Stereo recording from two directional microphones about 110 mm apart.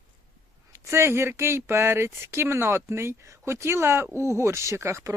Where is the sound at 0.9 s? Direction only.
25° right (ahead or behind).